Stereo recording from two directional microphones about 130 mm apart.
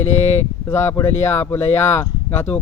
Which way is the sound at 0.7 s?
20° left (ahead or behind).